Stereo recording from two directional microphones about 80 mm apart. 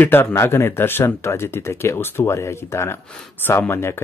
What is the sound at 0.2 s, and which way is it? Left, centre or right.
Speech, left.